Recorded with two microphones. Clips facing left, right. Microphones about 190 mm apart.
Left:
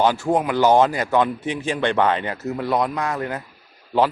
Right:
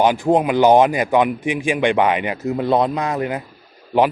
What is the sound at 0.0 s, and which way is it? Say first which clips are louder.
A man's voice: right 3 dB; 15° right (ahead or behind).